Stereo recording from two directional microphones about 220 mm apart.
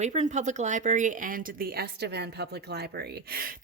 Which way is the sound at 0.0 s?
30° right (ahead or behind).